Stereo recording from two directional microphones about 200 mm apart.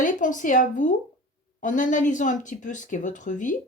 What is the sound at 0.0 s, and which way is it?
Speech, 40° left (ahead or behind).